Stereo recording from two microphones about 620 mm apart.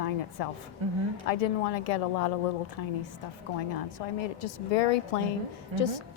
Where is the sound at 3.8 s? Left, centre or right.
Left.